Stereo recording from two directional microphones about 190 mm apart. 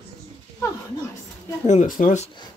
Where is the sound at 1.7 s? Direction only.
40° left (ahead or behind).